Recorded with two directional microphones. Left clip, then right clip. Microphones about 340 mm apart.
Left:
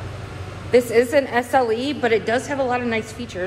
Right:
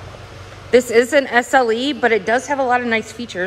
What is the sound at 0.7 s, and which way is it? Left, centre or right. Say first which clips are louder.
A woman's voice: right 3 dB; right.